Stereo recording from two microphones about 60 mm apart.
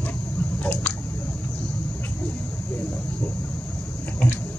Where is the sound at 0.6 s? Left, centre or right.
Left.